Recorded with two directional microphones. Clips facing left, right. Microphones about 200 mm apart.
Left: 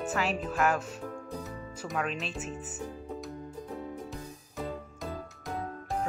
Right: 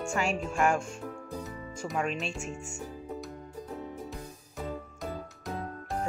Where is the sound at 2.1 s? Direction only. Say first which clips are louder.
Right 1 dB; centre (ahead or behind).